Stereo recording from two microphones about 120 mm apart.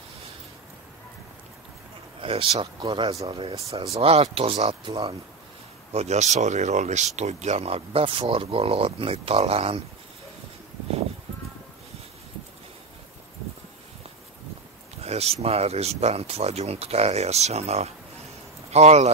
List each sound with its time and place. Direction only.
2.2 s speech: 50° right (ahead or behind)
5.9 s speech: 70° right (ahead or behind)
15.0 s speech: 60° right (ahead or behind)